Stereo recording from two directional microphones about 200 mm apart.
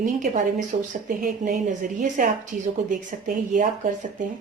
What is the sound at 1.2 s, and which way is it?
A woman's voice, 45° right (ahead or behind).